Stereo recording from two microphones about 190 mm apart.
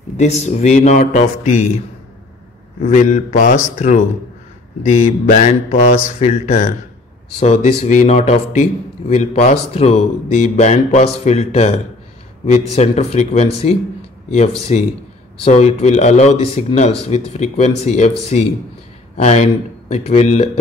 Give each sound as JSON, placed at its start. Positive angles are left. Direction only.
{"t": 0.2, "sound": "speech", "side_deg": 35}
{"t": 2.8, "sound": "speech", "side_deg": 40}
{"t": 12.7, "sound": "speech", "side_deg": 35}
{"t": 14.6, "sound": "speech", "side_deg": 35}
{"t": 19.1, "sound": "speech", "side_deg": 35}